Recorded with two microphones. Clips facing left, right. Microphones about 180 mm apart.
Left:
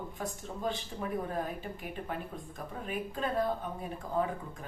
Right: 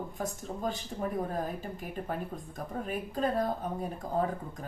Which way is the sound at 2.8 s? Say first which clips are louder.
Right 3 dB; 40° right (ahead or behind).